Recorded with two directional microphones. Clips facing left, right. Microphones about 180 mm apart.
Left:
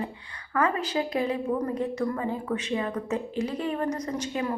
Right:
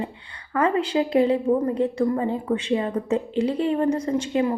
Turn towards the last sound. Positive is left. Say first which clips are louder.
# right 7 dB
turn(degrees=-25)  # may be behind; listen again after turning